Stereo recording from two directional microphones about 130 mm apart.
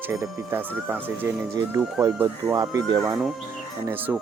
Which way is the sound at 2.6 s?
30° right (ahead or behind).